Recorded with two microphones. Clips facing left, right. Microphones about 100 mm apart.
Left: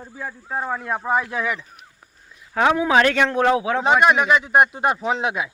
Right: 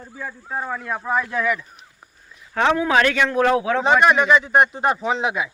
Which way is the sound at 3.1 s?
40° left (ahead or behind).